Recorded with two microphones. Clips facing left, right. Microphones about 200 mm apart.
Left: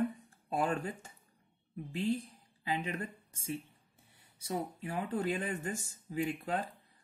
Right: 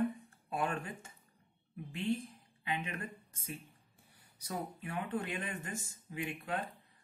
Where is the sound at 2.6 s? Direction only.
30° left (ahead or behind).